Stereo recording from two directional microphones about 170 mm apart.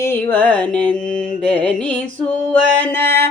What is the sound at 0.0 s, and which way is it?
Mantra, 10° left (ahead or behind).